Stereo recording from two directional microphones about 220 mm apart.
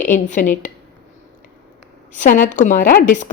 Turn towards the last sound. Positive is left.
turn(degrees=35)  # may be behind; listen again after turning